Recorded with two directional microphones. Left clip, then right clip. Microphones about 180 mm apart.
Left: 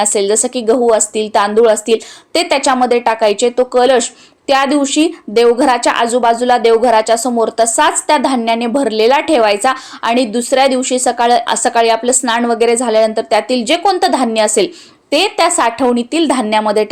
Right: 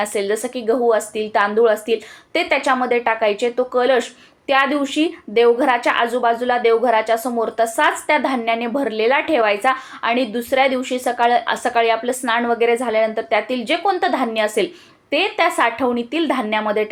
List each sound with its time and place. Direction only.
0.0 s speech: 40° left (ahead or behind)